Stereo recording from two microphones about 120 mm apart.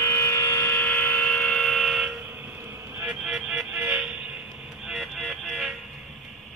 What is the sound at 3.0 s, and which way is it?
Vehicle, 5° right (ahead or behind).